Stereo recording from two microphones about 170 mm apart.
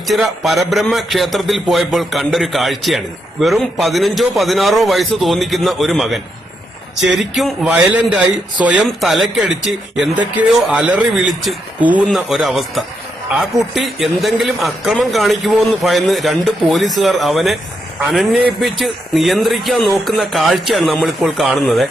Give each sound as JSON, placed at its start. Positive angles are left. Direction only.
{"t": 0.1, "sound": "a man's voice", "side_deg": 0}